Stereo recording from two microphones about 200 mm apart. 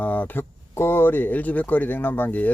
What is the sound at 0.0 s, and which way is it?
Speech, 10° left (ahead or behind).